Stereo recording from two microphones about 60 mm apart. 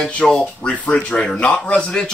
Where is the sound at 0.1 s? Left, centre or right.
Centre.